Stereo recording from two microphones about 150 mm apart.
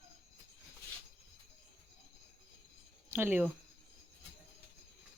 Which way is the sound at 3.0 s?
15° right (ahead or behind).